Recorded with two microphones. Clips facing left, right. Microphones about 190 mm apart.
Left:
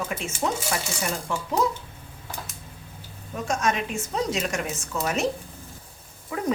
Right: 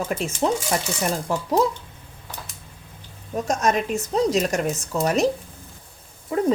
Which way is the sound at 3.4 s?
40° right (ahead or behind).